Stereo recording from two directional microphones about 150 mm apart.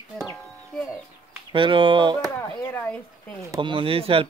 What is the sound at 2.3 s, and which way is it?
Speech, 20° left (ahead or behind).